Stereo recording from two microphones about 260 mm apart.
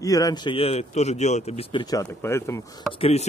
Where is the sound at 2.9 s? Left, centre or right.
Left.